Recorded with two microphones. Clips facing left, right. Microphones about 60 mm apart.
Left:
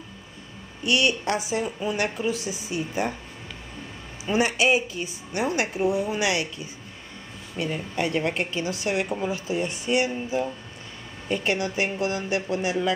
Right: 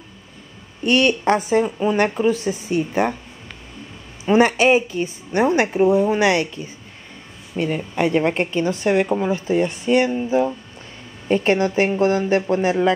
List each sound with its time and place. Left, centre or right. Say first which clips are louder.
0.8 s a woman's voice: right 7 dB; right
4.3 s a woman's voice: right 7 dB; right